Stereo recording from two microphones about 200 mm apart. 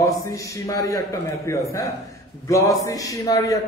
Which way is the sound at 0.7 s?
15° left (ahead or behind).